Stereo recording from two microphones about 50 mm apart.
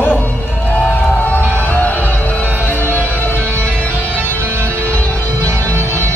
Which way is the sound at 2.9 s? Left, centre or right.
Left.